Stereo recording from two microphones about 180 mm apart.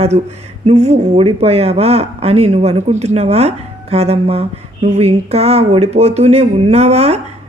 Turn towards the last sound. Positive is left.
turn(degrees=-35)  # may be behind; listen again after turning